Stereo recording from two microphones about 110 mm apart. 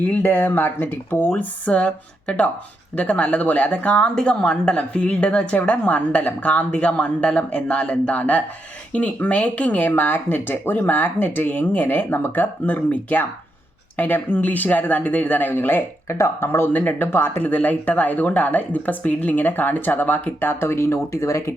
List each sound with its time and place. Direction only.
0.0 s speech: 15° left (ahead or behind)